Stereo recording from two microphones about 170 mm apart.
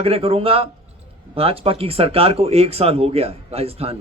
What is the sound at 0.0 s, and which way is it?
Speech, 35° right (ahead or behind).